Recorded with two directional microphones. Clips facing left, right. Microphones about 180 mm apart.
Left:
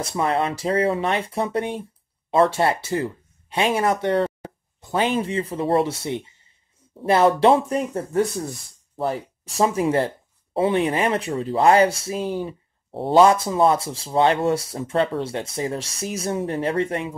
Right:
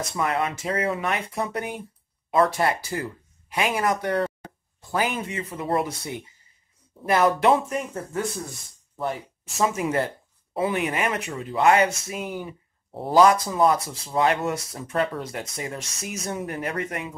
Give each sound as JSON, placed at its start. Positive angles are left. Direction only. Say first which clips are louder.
{"t": 0.0, "sound": "speech", "louder": "left 3 dB", "side_deg": 30}